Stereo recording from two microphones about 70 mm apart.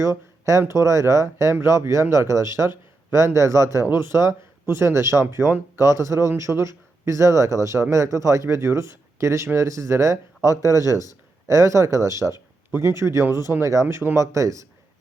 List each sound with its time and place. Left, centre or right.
0.0 s speech: right
13.8 s speech: right
14.2 s speech: right